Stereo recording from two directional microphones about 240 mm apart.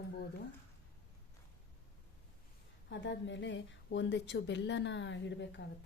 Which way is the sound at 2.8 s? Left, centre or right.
Left.